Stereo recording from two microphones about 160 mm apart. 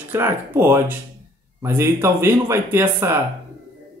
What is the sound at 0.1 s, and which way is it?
Speech, 15° right (ahead or behind).